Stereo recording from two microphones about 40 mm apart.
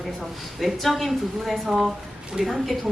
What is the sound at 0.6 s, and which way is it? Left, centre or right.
Speech, centre.